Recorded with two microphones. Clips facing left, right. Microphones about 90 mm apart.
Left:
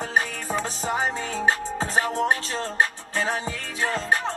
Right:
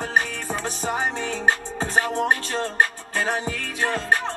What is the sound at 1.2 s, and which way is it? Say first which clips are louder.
Music: right 1 dB; 40° left (ahead or behind).